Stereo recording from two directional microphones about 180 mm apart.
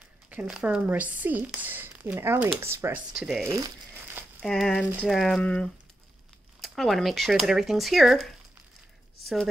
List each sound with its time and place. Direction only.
0.3 s speech: 5° right (ahead or behind)
3.2 s speech: centre (ahead or behind)
3.4 s crumpling: 15° right (ahead or behind)
4.4 s speech: centre (ahead or behind)